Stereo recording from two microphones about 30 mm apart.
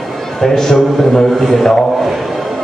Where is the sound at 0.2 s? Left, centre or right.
Centre.